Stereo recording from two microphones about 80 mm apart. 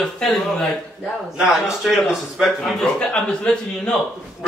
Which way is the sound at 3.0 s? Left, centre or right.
Centre.